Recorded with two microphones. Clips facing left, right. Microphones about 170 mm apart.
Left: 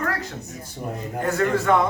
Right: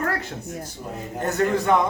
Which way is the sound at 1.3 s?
20° right (ahead or behind).